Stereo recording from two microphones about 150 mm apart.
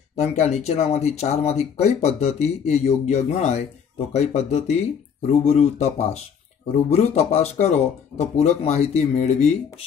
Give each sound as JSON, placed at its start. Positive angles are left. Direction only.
{"t": 0.1, "sound": "speech", "side_deg": 45}